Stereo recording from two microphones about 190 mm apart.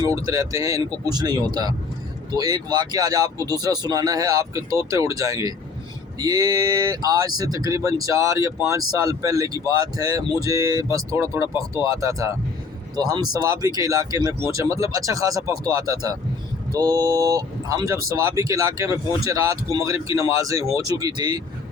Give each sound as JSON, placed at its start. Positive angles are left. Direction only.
{"t": 0.0, "sound": "speech", "side_deg": -15}